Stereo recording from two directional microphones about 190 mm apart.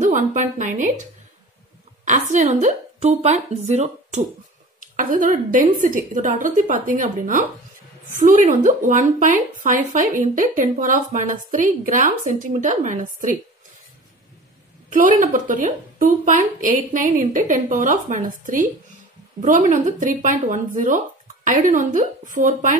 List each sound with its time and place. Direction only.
0.0 s a woman's voice: 40° right (ahead or behind)
2.0 s a woman's voice: 40° right (ahead or behind)
14.9 s a woman's voice: 45° right (ahead or behind)